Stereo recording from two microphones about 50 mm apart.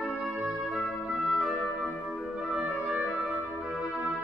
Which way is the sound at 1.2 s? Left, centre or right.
Centre.